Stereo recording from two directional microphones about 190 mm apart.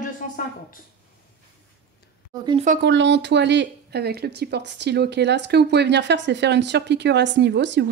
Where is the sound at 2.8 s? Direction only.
70° right (ahead or behind).